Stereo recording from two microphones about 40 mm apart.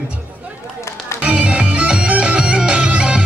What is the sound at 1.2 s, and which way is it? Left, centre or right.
Bagpipes, right.